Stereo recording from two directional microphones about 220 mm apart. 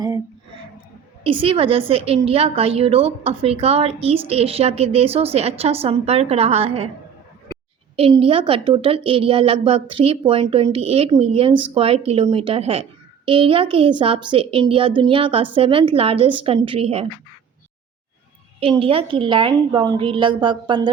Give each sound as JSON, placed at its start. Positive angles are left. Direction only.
{"t": 1.2, "sound": "a woman's voice", "side_deg": -25}
{"t": 7.9, "sound": "a woman's voice", "side_deg": -25}
{"t": 18.6, "sound": "a woman's voice", "side_deg": -25}